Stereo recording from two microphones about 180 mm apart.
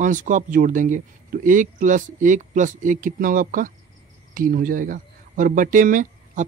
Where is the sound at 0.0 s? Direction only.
45° right (ahead or behind).